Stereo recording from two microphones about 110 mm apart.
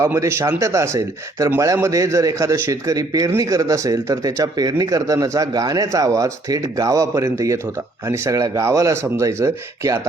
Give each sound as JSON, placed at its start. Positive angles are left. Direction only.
{"t": 0.0, "sound": "a man's voice", "side_deg": -25}